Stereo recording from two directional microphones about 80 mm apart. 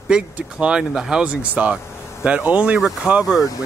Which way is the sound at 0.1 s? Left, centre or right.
Centre.